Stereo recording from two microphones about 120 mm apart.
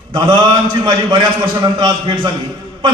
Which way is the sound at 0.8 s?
40° right (ahead or behind).